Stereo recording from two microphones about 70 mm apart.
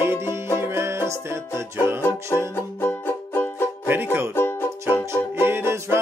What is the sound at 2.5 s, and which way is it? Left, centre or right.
Music, left.